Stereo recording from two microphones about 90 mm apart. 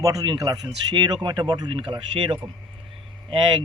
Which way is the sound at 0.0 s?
40° right (ahead or behind).